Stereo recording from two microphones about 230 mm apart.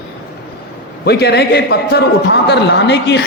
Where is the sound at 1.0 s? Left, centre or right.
Left.